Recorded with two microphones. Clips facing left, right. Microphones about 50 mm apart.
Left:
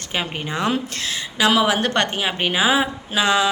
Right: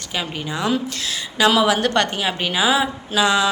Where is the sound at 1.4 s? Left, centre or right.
Centre.